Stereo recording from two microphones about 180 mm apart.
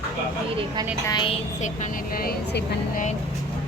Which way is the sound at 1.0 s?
25° left (ahead or behind).